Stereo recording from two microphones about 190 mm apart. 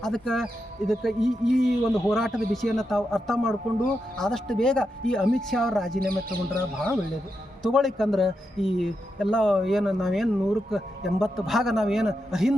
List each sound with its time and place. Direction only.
0.0 s speech: centre (ahead or behind)
6.0 s speech: 50° right (ahead or behind)
7.6 s speech: centre (ahead or behind)